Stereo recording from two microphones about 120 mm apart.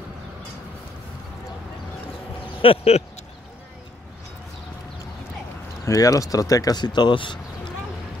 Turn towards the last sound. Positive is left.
turn(degrees=40)  # may be behind; listen again after turning